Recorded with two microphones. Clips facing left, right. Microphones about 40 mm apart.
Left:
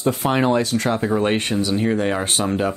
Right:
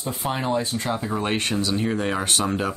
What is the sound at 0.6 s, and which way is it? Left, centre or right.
Speech, left.